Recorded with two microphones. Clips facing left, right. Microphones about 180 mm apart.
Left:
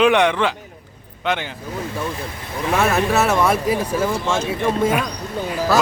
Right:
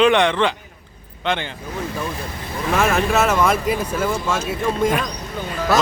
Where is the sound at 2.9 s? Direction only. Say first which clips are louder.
Even; 10° left (ahead or behind).